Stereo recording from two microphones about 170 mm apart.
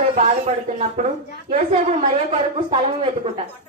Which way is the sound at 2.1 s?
35° right (ahead or behind).